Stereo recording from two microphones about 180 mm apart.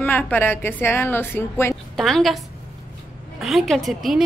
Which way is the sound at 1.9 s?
Centre (ahead or behind).